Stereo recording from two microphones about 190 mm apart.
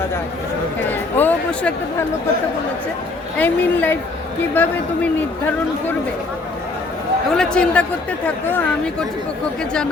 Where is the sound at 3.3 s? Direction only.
10° left (ahead or behind).